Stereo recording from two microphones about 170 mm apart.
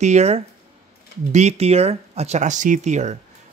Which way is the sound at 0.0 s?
40° right (ahead or behind).